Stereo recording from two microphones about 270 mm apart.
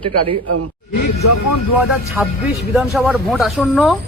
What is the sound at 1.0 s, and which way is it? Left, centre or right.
Speech, left.